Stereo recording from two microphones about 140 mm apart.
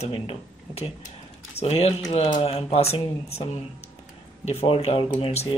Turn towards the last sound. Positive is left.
turn(degrees=50)  # may be behind; listen again after turning